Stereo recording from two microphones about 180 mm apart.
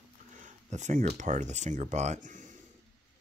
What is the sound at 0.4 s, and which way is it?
Speech, 45° right (ahead or behind).